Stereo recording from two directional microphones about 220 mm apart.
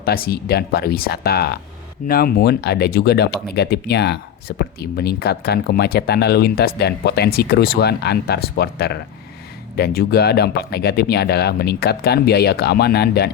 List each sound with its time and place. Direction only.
0.0 s speech: 45° left (ahead or behind)